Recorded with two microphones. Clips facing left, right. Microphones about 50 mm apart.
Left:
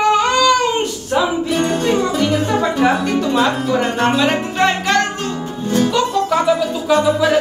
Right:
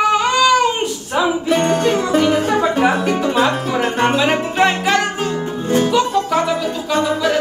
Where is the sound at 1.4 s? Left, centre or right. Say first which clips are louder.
Right 2 dB; right.